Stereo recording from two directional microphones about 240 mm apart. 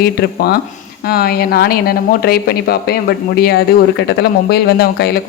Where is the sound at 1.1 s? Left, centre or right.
Left.